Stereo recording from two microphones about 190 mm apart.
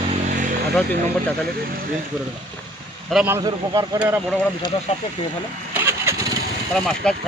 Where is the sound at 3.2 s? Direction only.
15° right (ahead or behind).